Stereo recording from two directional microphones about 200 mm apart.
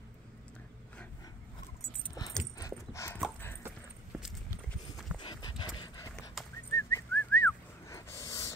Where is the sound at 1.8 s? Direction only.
20° left (ahead or behind).